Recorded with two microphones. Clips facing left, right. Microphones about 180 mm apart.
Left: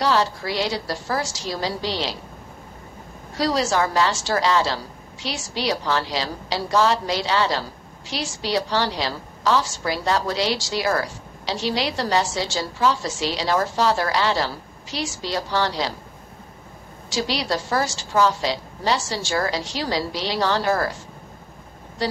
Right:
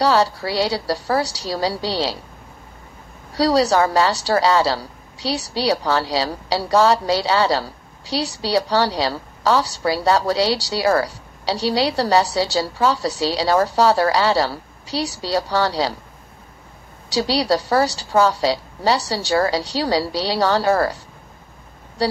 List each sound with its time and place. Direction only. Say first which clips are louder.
0.0 s a woman's voice: right 4 dB; 35° right (ahead or behind)
3.3 s a woman's voice: right 5 dB; 35° right (ahead or behind)
17.2 s a woman's voice: right 6 dB; 35° right (ahead or behind)